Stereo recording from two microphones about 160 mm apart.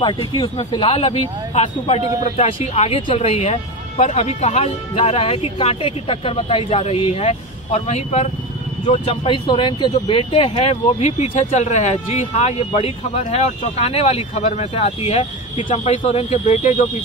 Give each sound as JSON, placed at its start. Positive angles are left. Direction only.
{"t": 0.0, "sound": "speech", "side_deg": 35}